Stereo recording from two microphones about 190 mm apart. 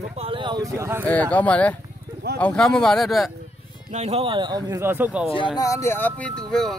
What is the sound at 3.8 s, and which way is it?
Speech, 35° right (ahead or behind).